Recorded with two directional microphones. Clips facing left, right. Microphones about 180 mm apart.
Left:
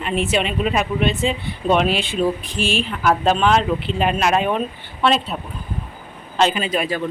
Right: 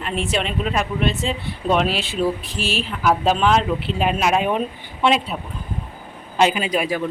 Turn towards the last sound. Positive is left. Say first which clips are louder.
# even
turn(degrees=-10)  # may be behind; listen again after turning